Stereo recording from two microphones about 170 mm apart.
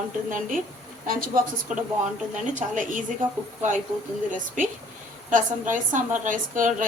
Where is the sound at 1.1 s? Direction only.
55° right (ahead or behind).